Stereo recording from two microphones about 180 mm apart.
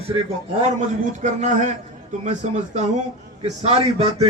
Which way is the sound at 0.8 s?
45° right (ahead or behind).